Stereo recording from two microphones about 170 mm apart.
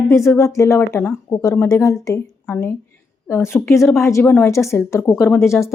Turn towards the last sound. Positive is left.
turn(degrees=15)  # may be behind; listen again after turning